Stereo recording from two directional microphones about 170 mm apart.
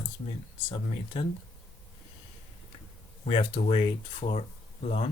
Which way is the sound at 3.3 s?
35° left (ahead or behind).